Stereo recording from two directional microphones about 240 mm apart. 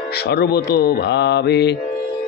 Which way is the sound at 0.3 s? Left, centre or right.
Left.